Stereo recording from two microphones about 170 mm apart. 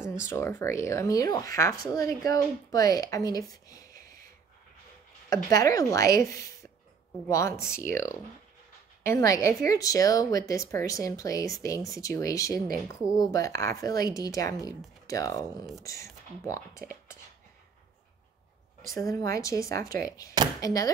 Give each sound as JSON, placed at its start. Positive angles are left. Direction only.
{"t": 0.1, "sound": "speech", "side_deg": 15}
{"t": 5.3, "sound": "speech", "side_deg": 20}
{"t": 18.9, "sound": "speech", "side_deg": 20}